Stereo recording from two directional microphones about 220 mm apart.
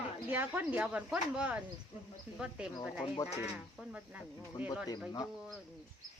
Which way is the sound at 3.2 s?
30° left (ahead or behind).